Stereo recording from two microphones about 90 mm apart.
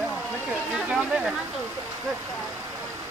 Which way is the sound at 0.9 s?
10° right (ahead or behind).